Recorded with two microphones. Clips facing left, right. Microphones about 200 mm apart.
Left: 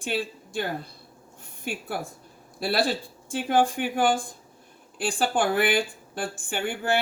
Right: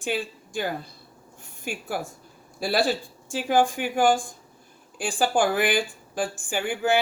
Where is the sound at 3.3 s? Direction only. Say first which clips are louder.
Right 1 dB; 55° left (ahead or behind).